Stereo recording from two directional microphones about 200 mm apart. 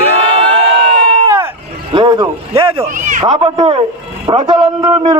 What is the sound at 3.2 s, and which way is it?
A man's voice, 20° right (ahead or behind).